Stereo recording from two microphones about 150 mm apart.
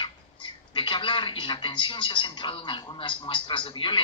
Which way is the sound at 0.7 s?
35° left (ahead or behind).